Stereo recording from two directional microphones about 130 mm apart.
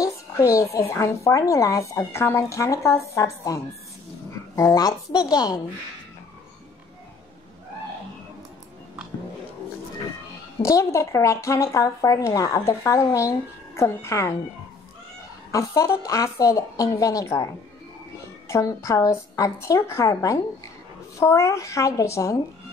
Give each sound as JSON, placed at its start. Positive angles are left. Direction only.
{"t": 0.0, "sound": "music", "side_deg": 25}
{"t": 0.7, "sound": "speech", "side_deg": 20}
{"t": 10.6, "sound": "speech", "side_deg": 25}
{"t": 15.5, "sound": "speech", "side_deg": 25}
{"t": 18.5, "sound": "speech", "side_deg": 25}